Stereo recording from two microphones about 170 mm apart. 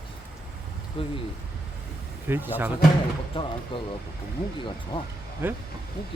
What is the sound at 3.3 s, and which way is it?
Speech, 30° left (ahead or behind).